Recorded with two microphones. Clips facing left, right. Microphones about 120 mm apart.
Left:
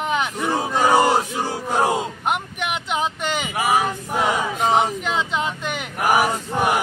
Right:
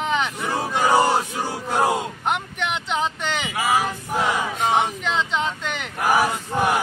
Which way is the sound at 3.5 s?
20° left (ahead or behind).